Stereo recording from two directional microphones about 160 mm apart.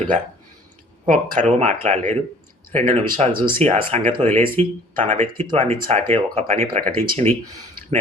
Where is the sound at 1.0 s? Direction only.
45° right (ahead or behind).